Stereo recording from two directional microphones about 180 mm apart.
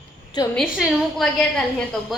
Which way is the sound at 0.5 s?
Centre (ahead or behind).